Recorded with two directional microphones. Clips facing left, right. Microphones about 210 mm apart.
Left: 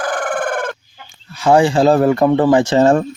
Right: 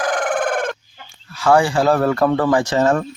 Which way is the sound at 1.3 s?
20° left (ahead or behind).